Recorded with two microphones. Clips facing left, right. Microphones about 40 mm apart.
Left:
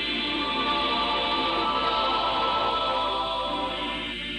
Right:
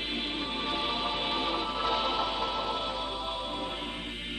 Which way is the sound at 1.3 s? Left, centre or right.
Left.